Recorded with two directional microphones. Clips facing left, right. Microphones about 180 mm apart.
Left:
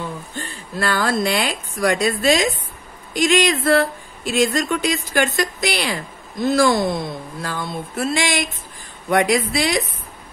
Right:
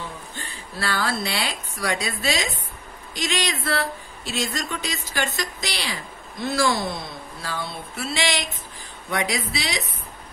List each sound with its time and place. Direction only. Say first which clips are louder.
0.4 s speech: left 7 dB; 50° left (ahead or behind)